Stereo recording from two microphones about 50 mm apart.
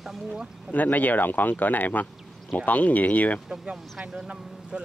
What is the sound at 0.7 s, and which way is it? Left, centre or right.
Speech, left.